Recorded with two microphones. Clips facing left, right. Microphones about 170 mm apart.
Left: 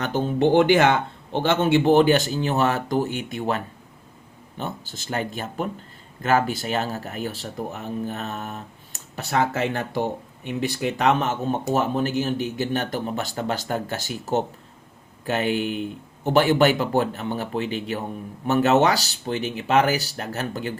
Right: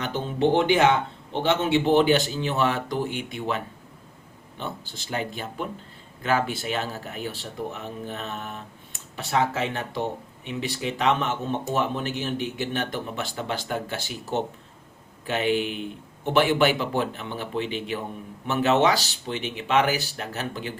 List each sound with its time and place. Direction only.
0.0 s speech: 45° left (ahead or behind)
0.7 s speech: 65° left (ahead or behind)
1.6 s speech: 45° left (ahead or behind)
10.4 s speech: 45° left (ahead or behind)